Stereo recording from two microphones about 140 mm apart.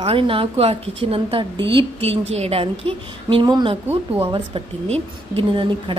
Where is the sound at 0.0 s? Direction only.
40° right (ahead or behind).